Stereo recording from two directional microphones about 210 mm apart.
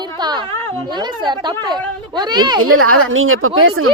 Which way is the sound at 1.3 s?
20° right (ahead or behind).